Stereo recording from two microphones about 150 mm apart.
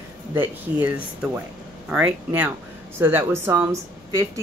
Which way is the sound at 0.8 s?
10° right (ahead or behind).